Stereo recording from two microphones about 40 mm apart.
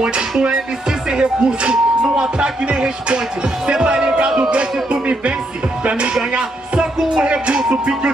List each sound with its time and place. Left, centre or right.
0.4 s speech: right
4.4 s music: right
5.9 s speech: right
6.3 s music: right